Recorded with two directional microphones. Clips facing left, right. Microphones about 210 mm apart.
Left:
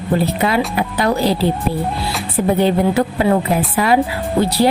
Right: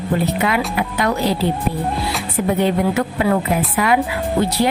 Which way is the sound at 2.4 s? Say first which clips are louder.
Left 3 dB; 30° left (ahead or behind).